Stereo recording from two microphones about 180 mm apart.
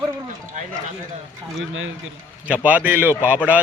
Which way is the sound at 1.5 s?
90° right.